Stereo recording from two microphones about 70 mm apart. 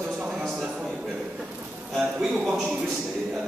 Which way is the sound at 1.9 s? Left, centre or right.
Centre.